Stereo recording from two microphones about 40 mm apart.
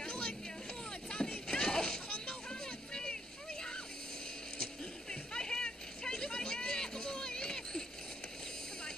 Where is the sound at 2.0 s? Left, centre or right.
Left.